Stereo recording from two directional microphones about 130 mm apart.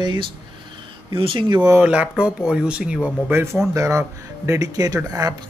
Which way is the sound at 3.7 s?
25° right (ahead or behind).